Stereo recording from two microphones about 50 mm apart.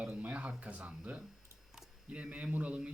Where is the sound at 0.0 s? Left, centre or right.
Right.